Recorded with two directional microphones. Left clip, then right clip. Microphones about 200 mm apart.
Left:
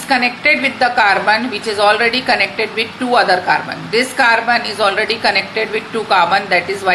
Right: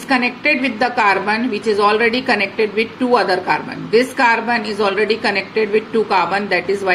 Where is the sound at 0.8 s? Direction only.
15° right (ahead or behind).